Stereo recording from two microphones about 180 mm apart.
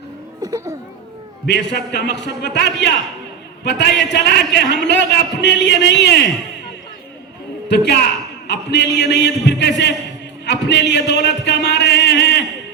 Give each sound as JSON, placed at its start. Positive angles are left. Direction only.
{"t": 0.4, "sound": "a child's voice", "side_deg": -15}
{"t": 1.5, "sound": "speech", "side_deg": 70}
{"t": 7.7, "sound": "speech", "side_deg": 70}